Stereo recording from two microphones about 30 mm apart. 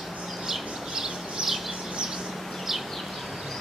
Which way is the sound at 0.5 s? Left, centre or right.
Centre.